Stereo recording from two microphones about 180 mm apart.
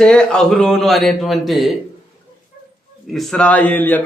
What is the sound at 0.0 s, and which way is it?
Speech, 5° left (ahead or behind).